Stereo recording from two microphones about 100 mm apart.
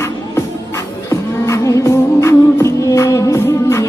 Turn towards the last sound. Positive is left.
turn(degrees=25)  # may be behind; listen again after turning